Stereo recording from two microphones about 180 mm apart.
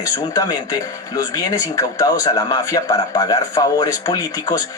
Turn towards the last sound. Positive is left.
turn(degrees=20)  # may be behind; listen again after turning